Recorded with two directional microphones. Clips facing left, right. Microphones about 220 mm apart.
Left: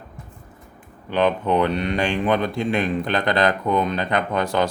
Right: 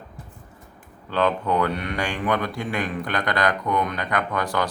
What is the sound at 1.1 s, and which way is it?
Speech, 20° left (ahead or behind).